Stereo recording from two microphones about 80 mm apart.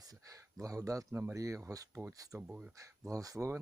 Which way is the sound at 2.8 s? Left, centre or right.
Right.